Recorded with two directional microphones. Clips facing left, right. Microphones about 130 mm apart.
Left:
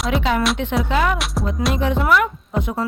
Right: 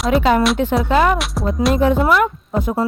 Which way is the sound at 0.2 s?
45° right (ahead or behind).